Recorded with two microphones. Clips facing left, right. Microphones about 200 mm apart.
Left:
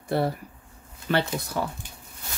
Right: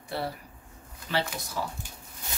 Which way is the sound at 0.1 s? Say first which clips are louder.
Left 8 dB; 55° left (ahead or behind).